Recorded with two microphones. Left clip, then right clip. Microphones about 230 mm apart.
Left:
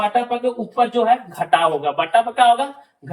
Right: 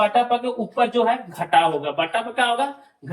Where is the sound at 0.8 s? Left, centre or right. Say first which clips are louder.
Left 3 dB; centre.